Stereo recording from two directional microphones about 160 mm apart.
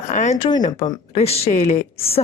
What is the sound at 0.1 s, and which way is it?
A woman's voice, 45° left (ahead or behind).